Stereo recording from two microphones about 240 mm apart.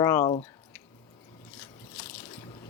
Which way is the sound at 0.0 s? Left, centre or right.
Centre.